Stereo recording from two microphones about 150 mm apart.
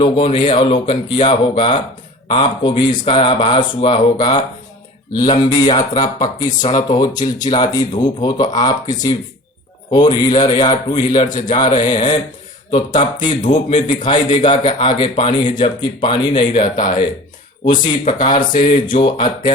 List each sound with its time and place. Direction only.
0.3 s a man's voice: 35° left (ahead or behind)
18.1 s a man's voice: 30° left (ahead or behind)